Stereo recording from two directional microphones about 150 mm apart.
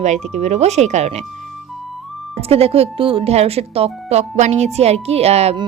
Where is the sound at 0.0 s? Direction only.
50° right (ahead or behind).